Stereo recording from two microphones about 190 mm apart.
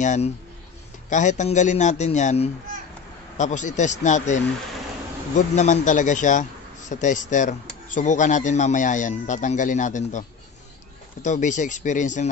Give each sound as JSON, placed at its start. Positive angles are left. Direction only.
{"t": 0.0, "sound": "speech", "side_deg": 40}
{"t": 5.6, "sound": "speech", "side_deg": 40}
{"t": 11.2, "sound": "speech", "side_deg": 40}